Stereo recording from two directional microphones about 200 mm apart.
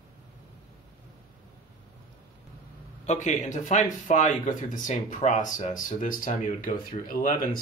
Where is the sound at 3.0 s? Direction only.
35° left (ahead or behind).